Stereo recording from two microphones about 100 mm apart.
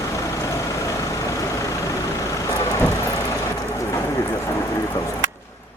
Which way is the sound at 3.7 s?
30° left (ahead or behind).